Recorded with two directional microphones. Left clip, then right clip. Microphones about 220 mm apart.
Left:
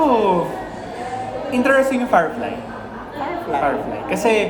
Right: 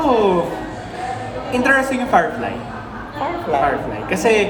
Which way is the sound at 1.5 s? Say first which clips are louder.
Even; 15° left (ahead or behind).